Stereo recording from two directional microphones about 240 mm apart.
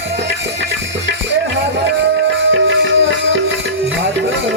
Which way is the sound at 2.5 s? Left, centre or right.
Right.